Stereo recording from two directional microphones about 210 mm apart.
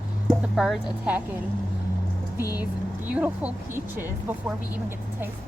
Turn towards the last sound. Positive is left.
turn(degrees=-10)  # may be behind; listen again after turning